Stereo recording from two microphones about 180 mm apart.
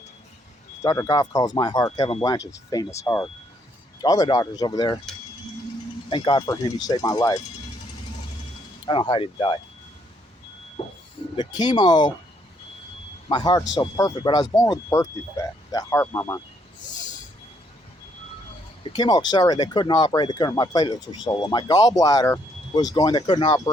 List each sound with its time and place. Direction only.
0.8 s speech: 20° left (ahead or behind)
6.1 s speech: 25° left (ahead or behind)
8.9 s speech: 30° left (ahead or behind)
10.8 s speech: 30° left (ahead or behind)
13.2 s speech: 25° left (ahead or behind)
18.9 s speech: 20° left (ahead or behind)